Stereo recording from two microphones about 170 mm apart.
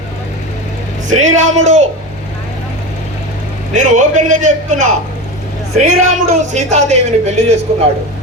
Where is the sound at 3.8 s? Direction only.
45° right (ahead or behind).